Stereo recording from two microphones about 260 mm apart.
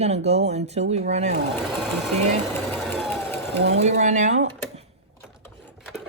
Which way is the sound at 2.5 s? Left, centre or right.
Centre.